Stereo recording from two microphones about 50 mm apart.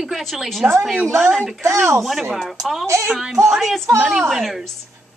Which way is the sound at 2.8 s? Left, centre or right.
Right.